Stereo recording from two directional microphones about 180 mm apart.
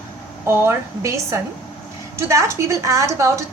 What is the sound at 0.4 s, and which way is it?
A woman's voice, 15° right (ahead or behind).